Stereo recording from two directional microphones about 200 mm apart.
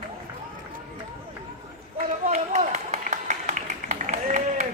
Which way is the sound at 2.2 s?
35° right (ahead or behind).